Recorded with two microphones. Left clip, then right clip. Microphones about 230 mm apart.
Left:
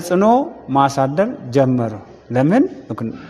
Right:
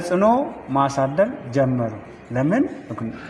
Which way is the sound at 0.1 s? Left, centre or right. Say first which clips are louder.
Left 4 dB; left.